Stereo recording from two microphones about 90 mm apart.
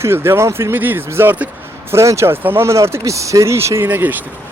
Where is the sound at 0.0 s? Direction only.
25° right (ahead or behind).